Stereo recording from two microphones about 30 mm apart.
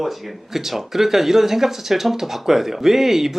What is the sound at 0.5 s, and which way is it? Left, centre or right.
Speech, centre.